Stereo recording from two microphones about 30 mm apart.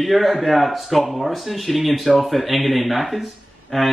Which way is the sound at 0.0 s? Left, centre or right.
Centre.